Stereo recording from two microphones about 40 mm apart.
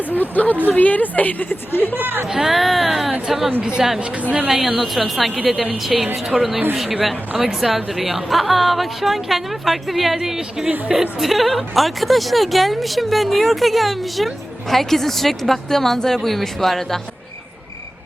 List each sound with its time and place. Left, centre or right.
0.1 s a woman's voice: left
2.0 s speech: right
2.3 s speech: centre
3.6 s a woman's voice: right
4.2 s a woman's voice: right
4.4 s a woman's voice: centre